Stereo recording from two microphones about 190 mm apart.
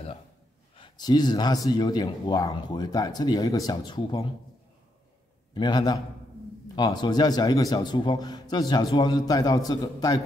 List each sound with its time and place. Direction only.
0.7 s speech: 25° left (ahead or behind)
5.5 s a man's voice: 25° left (ahead or behind)